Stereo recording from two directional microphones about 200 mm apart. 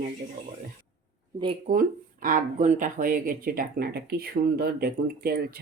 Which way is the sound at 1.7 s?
45° right (ahead or behind).